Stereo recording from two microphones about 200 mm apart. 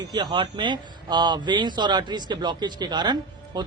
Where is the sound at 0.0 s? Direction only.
20° right (ahead or behind).